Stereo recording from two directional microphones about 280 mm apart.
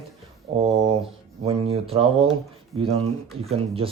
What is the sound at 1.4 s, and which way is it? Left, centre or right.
Speech, right.